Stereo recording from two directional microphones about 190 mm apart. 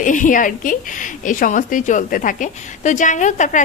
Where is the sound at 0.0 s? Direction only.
45° left (ahead or behind).